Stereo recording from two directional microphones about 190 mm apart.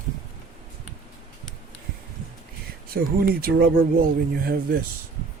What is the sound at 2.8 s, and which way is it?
Speech, 50° right (ahead or behind).